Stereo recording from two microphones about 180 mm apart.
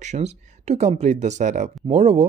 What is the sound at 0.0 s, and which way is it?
Speech, 40° right (ahead or behind).